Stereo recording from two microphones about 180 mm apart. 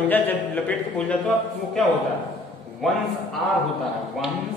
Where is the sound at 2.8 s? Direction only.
Centre (ahead or behind).